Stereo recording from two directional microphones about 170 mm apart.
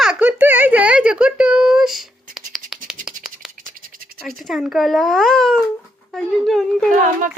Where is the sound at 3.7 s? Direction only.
55° right (ahead or behind).